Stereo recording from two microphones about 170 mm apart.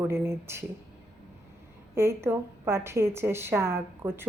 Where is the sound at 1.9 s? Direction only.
15° right (ahead or behind).